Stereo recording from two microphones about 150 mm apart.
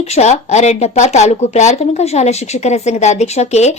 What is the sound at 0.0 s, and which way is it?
Speech, 45° left (ahead or behind).